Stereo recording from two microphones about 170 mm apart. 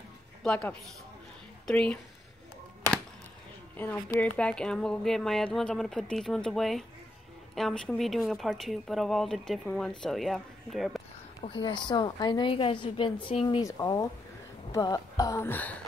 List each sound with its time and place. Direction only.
0.4 s speech: 5° left (ahead or behind)
3.7 s speech: 10° left (ahead or behind)
11.4 s a woman's voice: 30° left (ahead or behind); by 15.8 s 10° left (ahead or behind)